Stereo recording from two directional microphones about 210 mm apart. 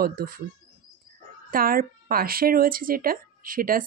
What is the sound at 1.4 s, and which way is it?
Speech, 45° right (ahead or behind).